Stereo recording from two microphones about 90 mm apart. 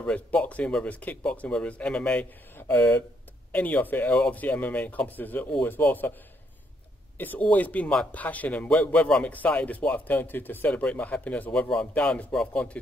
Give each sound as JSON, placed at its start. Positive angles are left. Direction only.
{"t": 0.0, "sound": "speech", "side_deg": 15}
{"t": 7.2, "sound": "speech", "side_deg": 20}